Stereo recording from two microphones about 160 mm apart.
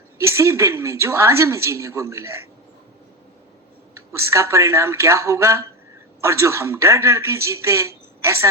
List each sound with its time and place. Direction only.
0.2 s a man's voice: 15° right (ahead or behind)
3.9 s a man's voice: 15° right (ahead or behind)